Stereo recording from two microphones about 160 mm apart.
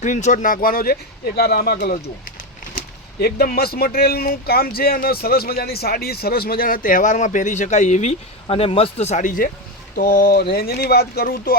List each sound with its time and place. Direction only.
0.0 s speech: 50° left (ahead or behind)
2.7 s speech: 75° left (ahead or behind); by 9.5 s 55° left (ahead or behind)
9.9 s speech: 70° left (ahead or behind)